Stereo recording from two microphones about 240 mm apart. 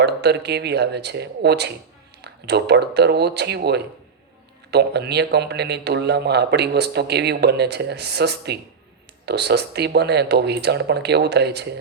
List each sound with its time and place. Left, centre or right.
0.0 s a man's voice: right